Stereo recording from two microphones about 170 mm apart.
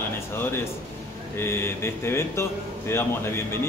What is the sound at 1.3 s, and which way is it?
Speech, 15° left (ahead or behind).